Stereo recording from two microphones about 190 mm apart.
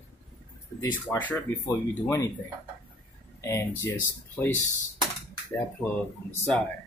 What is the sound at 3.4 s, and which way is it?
Speech, 15° left (ahead or behind).